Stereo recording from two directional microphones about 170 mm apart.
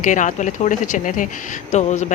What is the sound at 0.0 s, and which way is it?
Speech, 50° left (ahead or behind).